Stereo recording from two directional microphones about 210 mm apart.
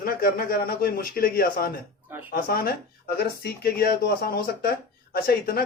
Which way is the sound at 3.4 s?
45° left (ahead or behind).